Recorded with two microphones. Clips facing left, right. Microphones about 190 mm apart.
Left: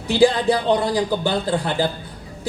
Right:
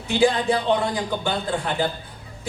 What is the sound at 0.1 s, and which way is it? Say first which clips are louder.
A man's voice: left 3 dB; 35° left (ahead or behind).